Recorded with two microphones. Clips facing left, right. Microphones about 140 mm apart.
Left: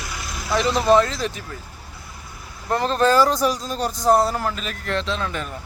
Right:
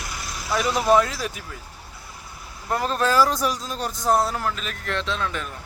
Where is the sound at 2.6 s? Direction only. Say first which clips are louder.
Left 4 dB; 5° right (ahead or behind).